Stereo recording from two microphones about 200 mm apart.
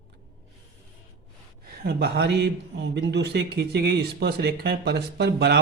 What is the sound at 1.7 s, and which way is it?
A man's voice, 55° right (ahead or behind).